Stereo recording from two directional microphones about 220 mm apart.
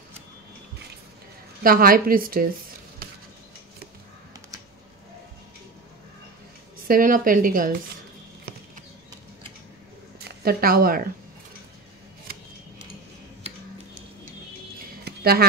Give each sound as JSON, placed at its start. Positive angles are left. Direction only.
{"t": 1.6, "sound": "a woman's voice", "side_deg": -40}
{"t": 6.9, "sound": "a woman's voice", "side_deg": -40}
{"t": 10.2, "sound": "speech", "side_deg": -45}
{"t": 14.8, "sound": "a sound", "side_deg": -45}